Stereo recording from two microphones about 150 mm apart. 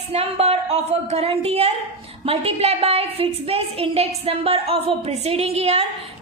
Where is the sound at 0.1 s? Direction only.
45° right (ahead or behind).